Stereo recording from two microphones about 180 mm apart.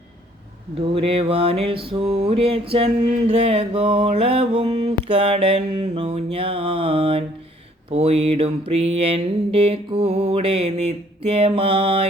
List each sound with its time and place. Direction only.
0.9 s mantra: 30° right (ahead or behind)